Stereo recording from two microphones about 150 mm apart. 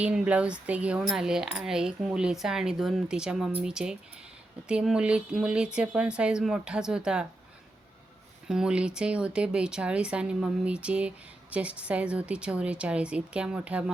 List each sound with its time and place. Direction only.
0.0 s speech: 10° right (ahead or behind)
8.4 s speech: 5° right (ahead or behind)